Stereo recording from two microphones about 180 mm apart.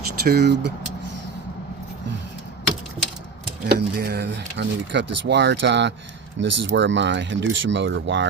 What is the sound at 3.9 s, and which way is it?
Speech, 60° right (ahead or behind).